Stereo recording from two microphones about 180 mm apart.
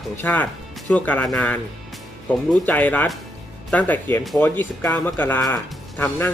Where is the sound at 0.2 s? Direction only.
10° left (ahead or behind).